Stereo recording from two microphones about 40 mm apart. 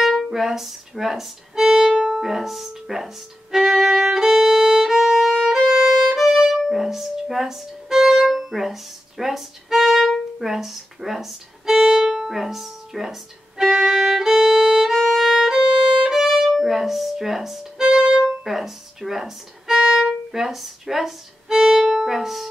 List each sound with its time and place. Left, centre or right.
0.0 s music: centre
0.3 s speech: centre
3.5 s violin: centre
5.7 s violin: centre
5.9 s violin: centre
17.8 s music: centre
18.4 s speech: centre